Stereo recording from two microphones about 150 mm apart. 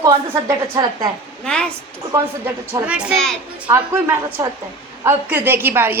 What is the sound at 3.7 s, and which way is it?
A woman's voice, 15° right (ahead or behind).